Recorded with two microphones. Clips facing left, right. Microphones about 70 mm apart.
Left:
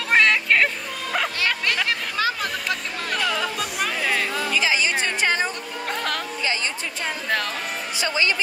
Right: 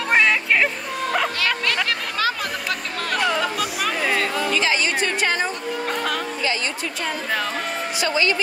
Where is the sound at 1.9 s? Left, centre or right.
Left.